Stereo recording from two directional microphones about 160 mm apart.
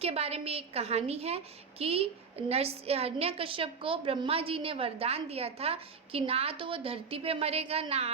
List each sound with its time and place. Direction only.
0.0 s a woman's voice: 40° right (ahead or behind)